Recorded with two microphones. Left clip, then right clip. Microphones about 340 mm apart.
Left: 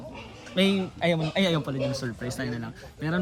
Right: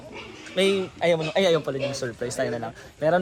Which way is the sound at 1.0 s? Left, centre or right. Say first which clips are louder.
Right 4 dB; centre.